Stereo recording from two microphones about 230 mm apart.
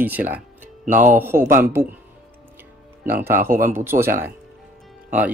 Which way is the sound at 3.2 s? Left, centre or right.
Centre.